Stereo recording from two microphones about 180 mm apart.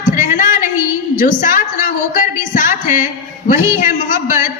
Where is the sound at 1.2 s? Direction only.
45° left (ahead or behind).